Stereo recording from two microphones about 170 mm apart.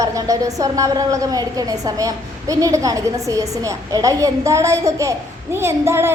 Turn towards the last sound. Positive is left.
turn(degrees=-15)  # may be behind; listen again after turning